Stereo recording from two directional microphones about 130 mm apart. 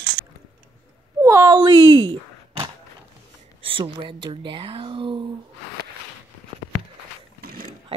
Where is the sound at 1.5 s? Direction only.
35° right (ahead or behind).